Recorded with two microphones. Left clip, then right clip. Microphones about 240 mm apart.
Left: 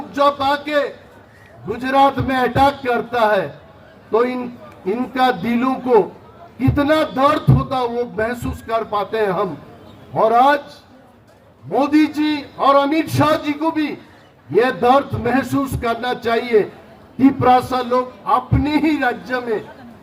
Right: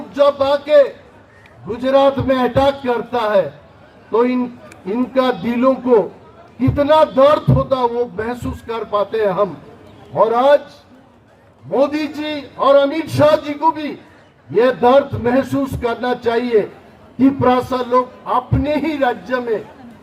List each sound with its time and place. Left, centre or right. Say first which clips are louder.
0.1 s speech: right 2 dB; left
11.7 s speech: left 1 dB; left